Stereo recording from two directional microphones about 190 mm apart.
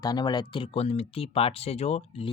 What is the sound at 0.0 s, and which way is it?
Speech, 20° left (ahead or behind).